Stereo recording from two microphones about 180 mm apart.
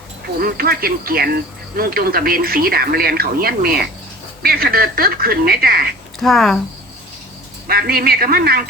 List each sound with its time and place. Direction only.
0.4 s speech: 55° right (ahead or behind)
6.1 s speech: centre (ahead or behind)
7.7 s speech: 55° right (ahead or behind)